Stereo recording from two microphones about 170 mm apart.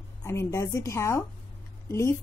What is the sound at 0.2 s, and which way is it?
Speech, 15° left (ahead or behind).